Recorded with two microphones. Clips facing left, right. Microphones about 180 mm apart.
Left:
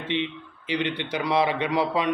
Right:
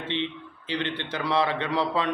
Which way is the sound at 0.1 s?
15° left (ahead or behind).